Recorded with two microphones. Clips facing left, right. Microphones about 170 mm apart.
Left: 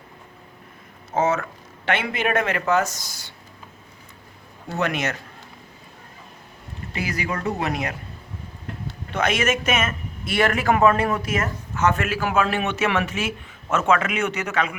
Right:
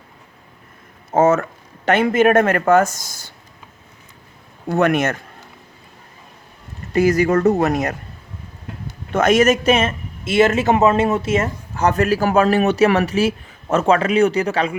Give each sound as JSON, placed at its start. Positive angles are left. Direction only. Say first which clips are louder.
{"t": 1.1, "sound": "speech", "louder": "right 7 dB", "side_deg": -50}
{"t": 4.7, "sound": "speech", "louder": "right 8 dB", "side_deg": -50}
{"t": 6.9, "sound": "speech", "louder": "right 13 dB", "side_deg": -45}
{"t": 9.1, "sound": "speech", "louder": "right 8 dB", "side_deg": -45}